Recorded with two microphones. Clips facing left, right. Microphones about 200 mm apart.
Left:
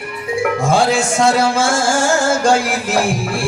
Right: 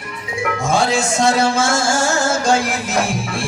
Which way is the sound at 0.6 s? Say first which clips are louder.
Left 1 dB; 30° left (ahead or behind).